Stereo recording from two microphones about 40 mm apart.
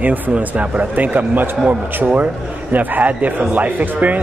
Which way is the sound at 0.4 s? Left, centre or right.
Right.